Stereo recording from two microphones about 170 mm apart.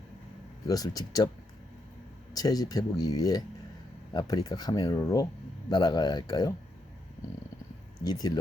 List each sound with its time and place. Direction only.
0.7 s speech: 20° left (ahead or behind)
2.3 s speech: 20° left (ahead or behind)
8.0 s speech: 25° left (ahead or behind)